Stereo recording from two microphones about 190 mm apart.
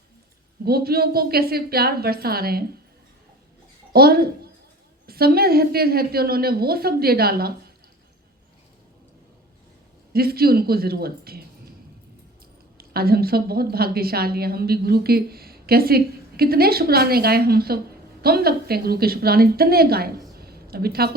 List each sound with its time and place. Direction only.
0.6 s a woman's voice: 55° right (ahead or behind)
3.9 s a woman's voice: 55° right (ahead or behind)
10.1 s a woman's voice: 55° right (ahead or behind)
12.7 s a woman's voice: 55° right (ahead or behind)